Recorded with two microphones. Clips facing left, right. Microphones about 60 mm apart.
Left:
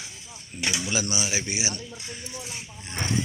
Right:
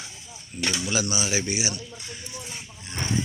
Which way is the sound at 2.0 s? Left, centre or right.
Centre.